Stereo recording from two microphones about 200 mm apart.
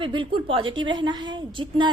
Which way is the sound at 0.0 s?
25° right (ahead or behind).